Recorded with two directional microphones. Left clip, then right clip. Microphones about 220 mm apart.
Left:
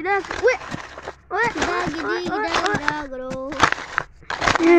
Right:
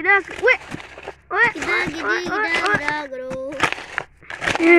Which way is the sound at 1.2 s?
Centre (ahead or behind).